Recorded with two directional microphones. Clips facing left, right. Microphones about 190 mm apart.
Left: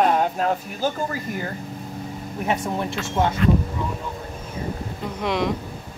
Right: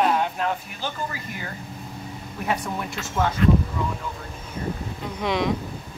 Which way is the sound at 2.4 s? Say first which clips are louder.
Left 3 dB; 25° left (ahead or behind).